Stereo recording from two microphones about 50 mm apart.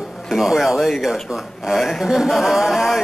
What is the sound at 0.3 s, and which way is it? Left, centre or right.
A man's voice, centre.